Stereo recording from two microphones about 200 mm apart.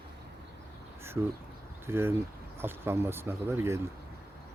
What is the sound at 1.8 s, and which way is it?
A man's voice, 10° right (ahead or behind).